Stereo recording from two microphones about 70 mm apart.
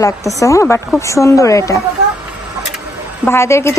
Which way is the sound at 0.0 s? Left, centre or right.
Left.